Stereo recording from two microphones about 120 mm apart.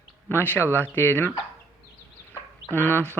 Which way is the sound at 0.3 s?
15° left (ahead or behind).